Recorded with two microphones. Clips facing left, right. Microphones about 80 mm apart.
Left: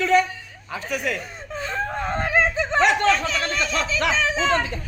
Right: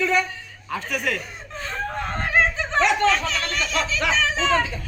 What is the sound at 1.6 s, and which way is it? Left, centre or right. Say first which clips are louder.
Whimper: left 2 dB; centre.